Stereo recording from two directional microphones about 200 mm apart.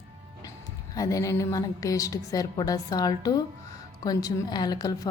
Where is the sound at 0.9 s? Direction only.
15° left (ahead or behind).